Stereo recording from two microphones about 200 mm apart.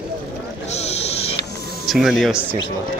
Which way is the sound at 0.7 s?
30° left (ahead or behind).